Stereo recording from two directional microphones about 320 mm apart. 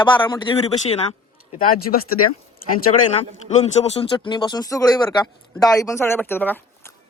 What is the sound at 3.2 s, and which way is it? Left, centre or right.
Speech, centre.